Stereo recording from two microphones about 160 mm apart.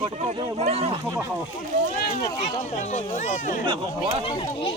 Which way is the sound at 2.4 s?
45° left (ahead or behind).